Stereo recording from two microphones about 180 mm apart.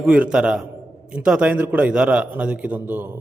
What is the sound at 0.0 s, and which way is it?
A man's voice, 5° right (ahead or behind).